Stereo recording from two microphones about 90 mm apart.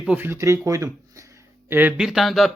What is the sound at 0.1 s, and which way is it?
Speech, 25° right (ahead or behind).